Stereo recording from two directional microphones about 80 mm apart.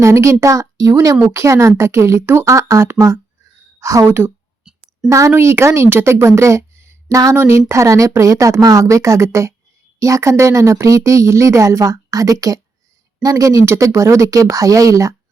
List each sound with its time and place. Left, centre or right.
0.0 s a woman's voice: right
4.0 s a woman's voice: right
4.7 s a sound: centre
5.0 s a woman's voice: right